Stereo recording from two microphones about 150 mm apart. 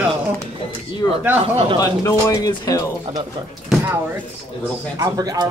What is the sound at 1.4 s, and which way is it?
Speech, 40° right (ahead or behind).